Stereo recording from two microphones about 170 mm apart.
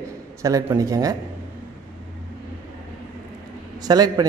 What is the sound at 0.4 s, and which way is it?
Speech, 20° right (ahead or behind).